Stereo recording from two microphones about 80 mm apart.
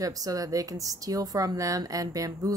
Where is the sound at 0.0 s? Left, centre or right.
Right.